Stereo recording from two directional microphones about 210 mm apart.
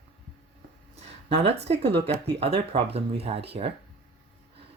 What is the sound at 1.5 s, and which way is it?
Speech, 30° right (ahead or behind).